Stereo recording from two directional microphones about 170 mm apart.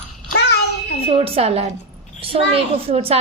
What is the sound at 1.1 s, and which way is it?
Speech, 35° right (ahead or behind).